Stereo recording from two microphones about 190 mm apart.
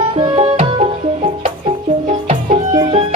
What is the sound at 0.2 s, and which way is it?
Music, 35° right (ahead or behind).